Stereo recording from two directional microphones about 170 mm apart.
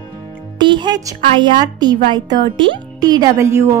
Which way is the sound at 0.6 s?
25° right (ahead or behind).